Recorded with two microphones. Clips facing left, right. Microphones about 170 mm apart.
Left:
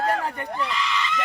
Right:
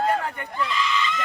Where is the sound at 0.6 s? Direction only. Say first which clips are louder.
Right 4 dB; 70° left (ahead or behind).